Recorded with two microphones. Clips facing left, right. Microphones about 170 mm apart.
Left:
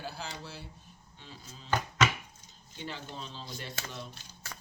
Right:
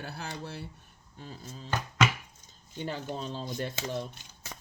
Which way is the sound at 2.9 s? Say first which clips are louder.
Right 8 dB; 45° right (ahead or behind).